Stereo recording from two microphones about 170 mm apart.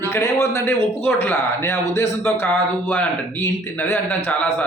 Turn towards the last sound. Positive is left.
turn(degrees=15)  # may be behind; listen again after turning